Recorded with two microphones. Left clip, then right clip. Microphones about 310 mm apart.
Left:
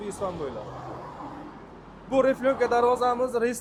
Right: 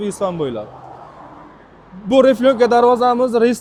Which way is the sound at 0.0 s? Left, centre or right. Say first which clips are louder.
Right 11 dB; right.